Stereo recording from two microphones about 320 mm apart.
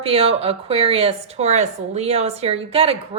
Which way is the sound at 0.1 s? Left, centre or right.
Centre.